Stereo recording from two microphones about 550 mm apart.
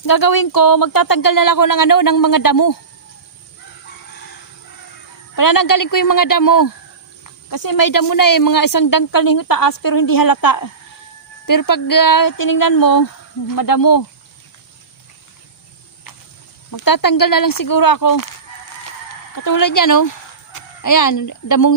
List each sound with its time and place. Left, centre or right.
0.0 s speech: left
5.4 s speech: left
16.7 s speech: left
19.4 s speech: left